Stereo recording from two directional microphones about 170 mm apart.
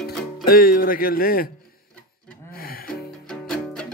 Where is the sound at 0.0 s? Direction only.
60° left (ahead or behind).